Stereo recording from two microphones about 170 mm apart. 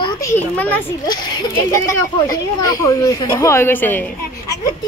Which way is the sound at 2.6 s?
20° left (ahead or behind).